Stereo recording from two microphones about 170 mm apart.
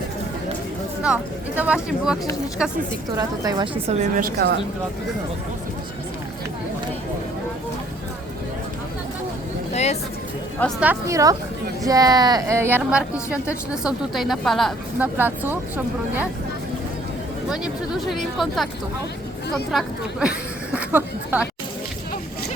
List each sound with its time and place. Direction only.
1.0 s speech: 5° right (ahead or behind)
3.2 s a woman's voice: 20° right (ahead or behind)
3.8 s a woman's voice: 40° right (ahead or behind)
4.2 s a woman's voice: 60° right (ahead or behind)
9.7 s speech: 40° left (ahead or behind)
10.8 s a woman's voice: 15° right (ahead or behind)
14.9 s a woman's voice: 10° right (ahead or behind)
18.3 s speech: centre (ahead or behind)
19.7 s speech: 5° right (ahead or behind)